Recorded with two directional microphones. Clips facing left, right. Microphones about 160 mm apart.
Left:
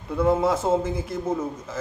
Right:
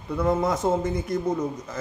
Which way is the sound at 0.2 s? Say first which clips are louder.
Left 2 dB; 5° left (ahead or behind).